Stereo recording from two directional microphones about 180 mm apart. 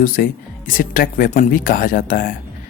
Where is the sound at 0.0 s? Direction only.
50° left (ahead or behind).